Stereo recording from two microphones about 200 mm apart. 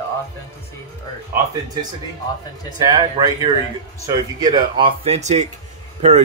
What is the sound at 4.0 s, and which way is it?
A man's voice, 20° right (ahead or behind).